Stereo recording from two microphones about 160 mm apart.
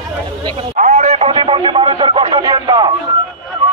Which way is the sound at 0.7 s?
50° right (ahead or behind).